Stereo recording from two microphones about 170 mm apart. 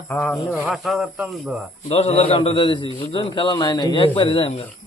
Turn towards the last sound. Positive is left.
turn(degrees=30)  # may be behind; listen again after turning